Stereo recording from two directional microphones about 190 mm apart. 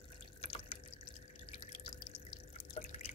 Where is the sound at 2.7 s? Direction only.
35° left (ahead or behind).